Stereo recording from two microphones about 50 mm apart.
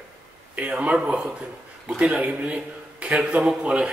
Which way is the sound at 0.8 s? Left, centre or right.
Right.